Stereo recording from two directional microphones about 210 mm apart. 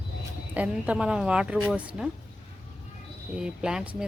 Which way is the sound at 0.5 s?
5° right (ahead or behind).